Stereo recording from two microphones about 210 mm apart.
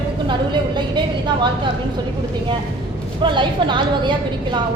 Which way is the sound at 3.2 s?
20° right (ahead or behind).